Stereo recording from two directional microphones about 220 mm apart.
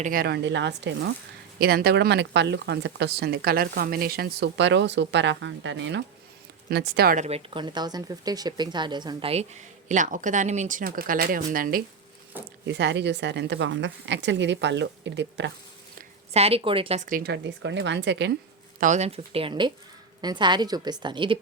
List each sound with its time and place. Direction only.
0.0 s speech: 40° right (ahead or behind)
7.3 s speech: 25° right (ahead or behind); by 11.8 s 40° right (ahead or behind)
12.6 s speech: 50° right (ahead or behind)
16.3 s speech: 25° right (ahead or behind); by 18.3 s 50° right (ahead or behind)
18.8 s a woman's voice: 30° right (ahead or behind)